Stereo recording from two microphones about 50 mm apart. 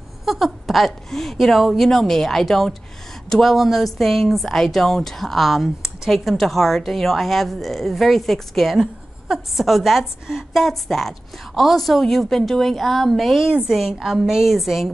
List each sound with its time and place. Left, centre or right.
0.2 s a woman's voice: centre